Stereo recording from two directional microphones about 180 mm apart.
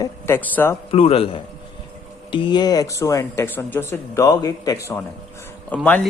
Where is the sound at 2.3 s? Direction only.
25° left (ahead or behind); by 5.9 s 10° left (ahead or behind).